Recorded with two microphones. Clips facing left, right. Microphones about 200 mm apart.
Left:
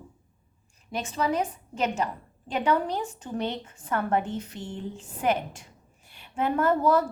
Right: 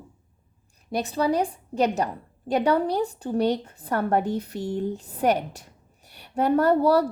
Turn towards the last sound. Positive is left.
turn(degrees=-35)  # may be behind; listen again after turning